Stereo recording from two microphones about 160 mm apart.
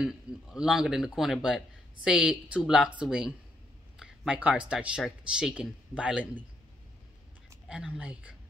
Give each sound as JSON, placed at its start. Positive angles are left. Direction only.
{"t": 0.0, "sound": "speech", "side_deg": -5}
{"t": 7.6, "sound": "speech", "side_deg": -5}